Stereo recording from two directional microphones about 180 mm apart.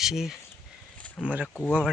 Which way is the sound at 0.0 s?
Centre (ahead or behind).